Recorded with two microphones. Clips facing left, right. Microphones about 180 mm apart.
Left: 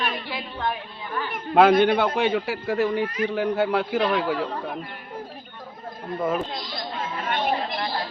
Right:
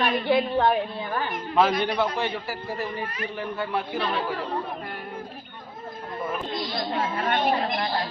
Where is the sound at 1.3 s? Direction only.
60° left (ahead or behind); by 4.4 s 85° left.